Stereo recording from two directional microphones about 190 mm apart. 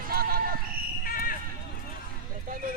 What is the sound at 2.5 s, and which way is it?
Horse, 45° right (ahead or behind).